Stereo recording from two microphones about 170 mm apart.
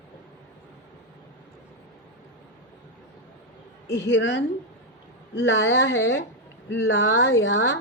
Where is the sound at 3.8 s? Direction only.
90° left.